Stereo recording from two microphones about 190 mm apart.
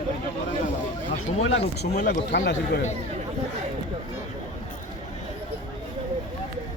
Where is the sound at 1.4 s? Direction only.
80° left.